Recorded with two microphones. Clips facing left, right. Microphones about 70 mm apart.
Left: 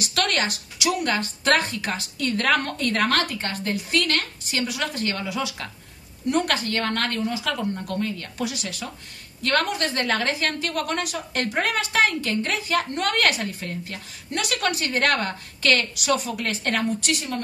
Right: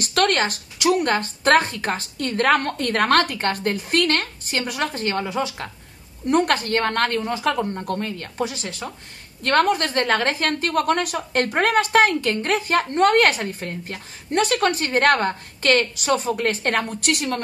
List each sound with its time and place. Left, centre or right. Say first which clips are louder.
0.0 s a woman's voice: right 5 dB; right